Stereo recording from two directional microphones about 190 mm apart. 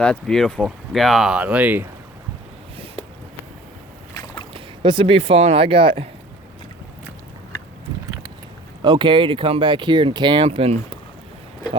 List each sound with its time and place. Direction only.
0.0 s speech: 5° left (ahead or behind)
4.1 s boat: 20° left (ahead or behind)
4.5 s speech: 25° right (ahead or behind)
8.8 s speech: 25° right (ahead or behind)